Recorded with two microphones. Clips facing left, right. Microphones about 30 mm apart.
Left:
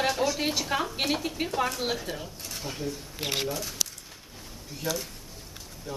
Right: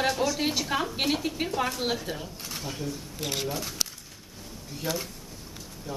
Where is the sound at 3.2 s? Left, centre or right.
Left.